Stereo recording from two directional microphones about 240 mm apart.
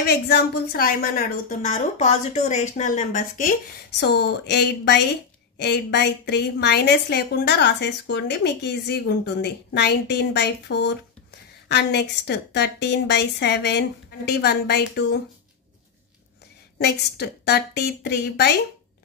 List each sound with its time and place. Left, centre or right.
0.0 s a woman's voice: left
4.0 s a woman's voice: left
16.7 s a woman's voice: left